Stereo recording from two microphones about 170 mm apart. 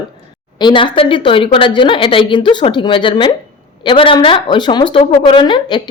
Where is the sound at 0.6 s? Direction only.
30° left (ahead or behind).